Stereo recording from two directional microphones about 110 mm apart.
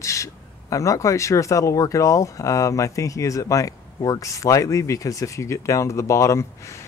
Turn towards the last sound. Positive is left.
turn(degrees=25)  # may be behind; listen again after turning